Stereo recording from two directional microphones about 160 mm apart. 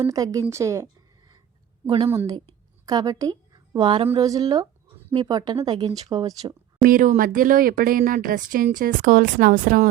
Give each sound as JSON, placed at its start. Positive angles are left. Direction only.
{"t": 0.0, "sound": "a woman's voice", "side_deg": -20}
{"t": 2.0, "sound": "a woman's voice", "side_deg": -20}
{"t": 4.2, "sound": "speech", "side_deg": -25}
{"t": 6.8, "sound": "speech", "side_deg": -60}